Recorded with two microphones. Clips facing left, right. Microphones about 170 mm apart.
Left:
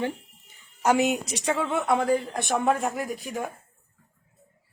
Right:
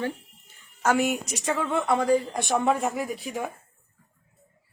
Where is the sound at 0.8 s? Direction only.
15° left (ahead or behind).